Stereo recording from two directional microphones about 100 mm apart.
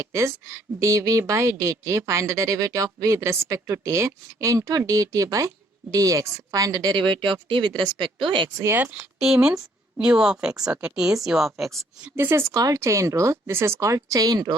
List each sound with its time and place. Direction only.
0.0 s a woman's voice: 30° right (ahead or behind)
6.9 s speech: 55° right (ahead or behind)
8.5 s speech: 25° right (ahead or behind)
9.0 s speech: 5° right (ahead or behind)
12.1 s a woman's voice: 25° right (ahead or behind)